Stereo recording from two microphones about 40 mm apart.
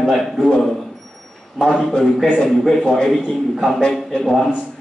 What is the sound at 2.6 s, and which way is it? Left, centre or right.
A man's voice, centre.